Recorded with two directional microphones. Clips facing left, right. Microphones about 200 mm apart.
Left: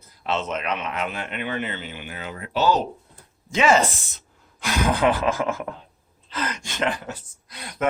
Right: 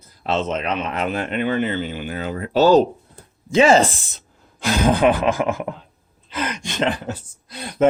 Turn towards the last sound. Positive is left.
turn(degrees=-30)  # may be behind; listen again after turning